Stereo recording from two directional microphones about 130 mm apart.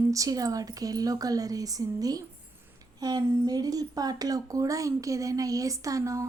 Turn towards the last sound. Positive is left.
turn(degrees=-25)  # may be behind; listen again after turning